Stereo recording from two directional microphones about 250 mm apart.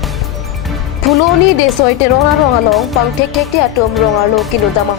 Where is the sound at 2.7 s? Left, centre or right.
Centre.